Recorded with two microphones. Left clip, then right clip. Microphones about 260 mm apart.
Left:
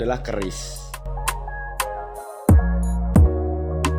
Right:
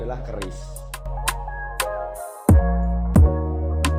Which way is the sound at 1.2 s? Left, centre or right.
Centre.